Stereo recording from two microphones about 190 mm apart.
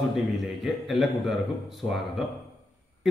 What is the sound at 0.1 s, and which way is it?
A man's voice, centre (ahead or behind).